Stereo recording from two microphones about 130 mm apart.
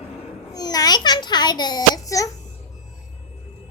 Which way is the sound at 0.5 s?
30° left (ahead or behind).